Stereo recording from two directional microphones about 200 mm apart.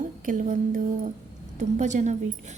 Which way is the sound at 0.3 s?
40° right (ahead or behind).